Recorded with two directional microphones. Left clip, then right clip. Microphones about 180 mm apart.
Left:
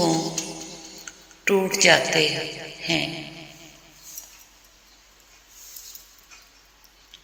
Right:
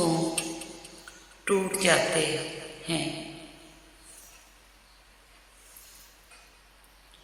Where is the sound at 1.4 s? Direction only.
15° left (ahead or behind).